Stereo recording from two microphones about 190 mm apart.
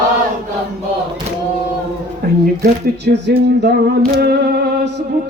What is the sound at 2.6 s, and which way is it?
Speech, 60° right (ahead or behind).